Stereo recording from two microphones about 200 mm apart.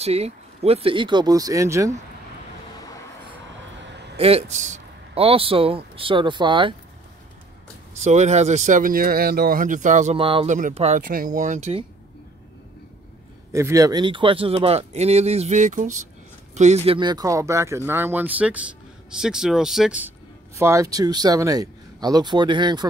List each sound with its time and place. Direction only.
0.0 s speech: 30° right (ahead or behind); by 2.0 s 15° right (ahead or behind)
4.2 s speech: 30° right (ahead or behind)
7.9 s speech: 35° right (ahead or behind)
11.0 s speech: 45° right (ahead or behind)
13.5 s speech: 15° right (ahead or behind)
20.5 s speech: 15° right (ahead or behind)